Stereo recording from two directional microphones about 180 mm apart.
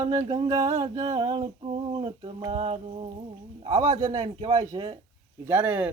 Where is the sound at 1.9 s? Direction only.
30° right (ahead or behind).